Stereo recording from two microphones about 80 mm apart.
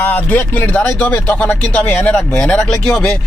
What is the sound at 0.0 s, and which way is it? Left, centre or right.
Speech, left.